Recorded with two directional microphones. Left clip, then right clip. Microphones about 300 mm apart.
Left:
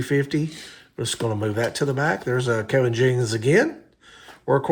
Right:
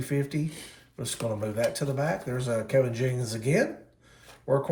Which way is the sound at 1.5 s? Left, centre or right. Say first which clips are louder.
Left 4 dB; left.